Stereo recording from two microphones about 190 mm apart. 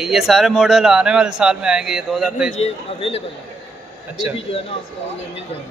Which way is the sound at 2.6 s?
30° left (ahead or behind).